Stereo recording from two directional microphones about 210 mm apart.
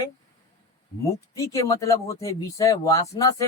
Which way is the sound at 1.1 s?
15° left (ahead or behind).